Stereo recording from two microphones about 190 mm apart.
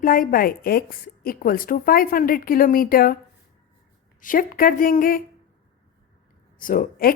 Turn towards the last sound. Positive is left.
turn(degrees=50)  # may be behind; listen again after turning